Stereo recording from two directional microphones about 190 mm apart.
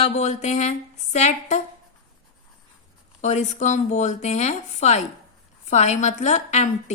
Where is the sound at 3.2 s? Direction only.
35° left (ahead or behind).